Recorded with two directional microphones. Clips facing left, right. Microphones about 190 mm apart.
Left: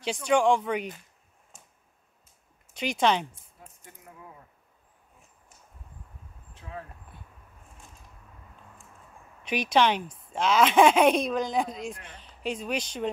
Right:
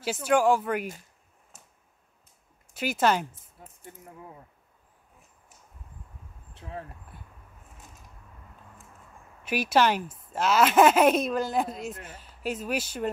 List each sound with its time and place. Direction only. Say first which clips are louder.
0.0 s speech: even; 5° right (ahead or behind)
2.7 s speech: even; 5° right (ahead or behind)
9.4 s speech: even; 5° right (ahead or behind)